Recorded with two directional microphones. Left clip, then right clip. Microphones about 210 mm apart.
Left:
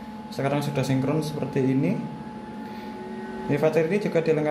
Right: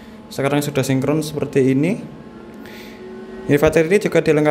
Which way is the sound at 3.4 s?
40° right (ahead or behind).